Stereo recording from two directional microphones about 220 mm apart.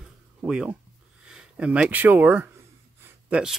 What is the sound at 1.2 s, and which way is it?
Speech, 5° right (ahead or behind).